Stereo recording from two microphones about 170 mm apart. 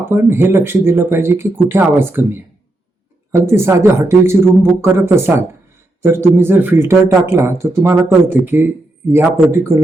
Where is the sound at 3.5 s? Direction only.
15° right (ahead or behind).